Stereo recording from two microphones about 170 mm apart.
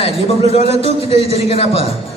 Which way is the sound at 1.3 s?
35° left (ahead or behind).